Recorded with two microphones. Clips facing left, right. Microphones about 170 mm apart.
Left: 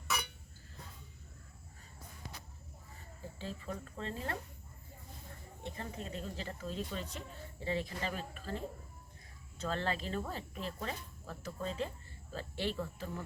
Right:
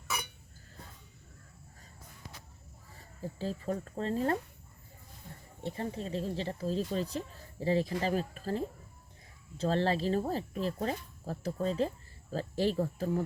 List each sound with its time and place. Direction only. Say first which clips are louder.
3.3 s speech: right 8 dB; 40° right (ahead or behind)
5.6 s speech: right 7 dB; 30° right (ahead or behind)